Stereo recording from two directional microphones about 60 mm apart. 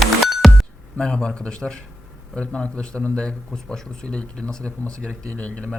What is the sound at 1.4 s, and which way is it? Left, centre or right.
A man's voice, centre.